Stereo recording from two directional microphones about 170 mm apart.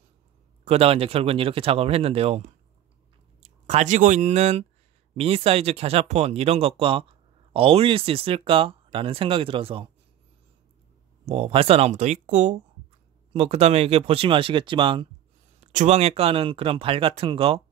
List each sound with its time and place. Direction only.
0.7 s speech: 35° right (ahead or behind)
11.2 s speech: 35° right (ahead or behind)
15.6 s speech: 45° right (ahead or behind)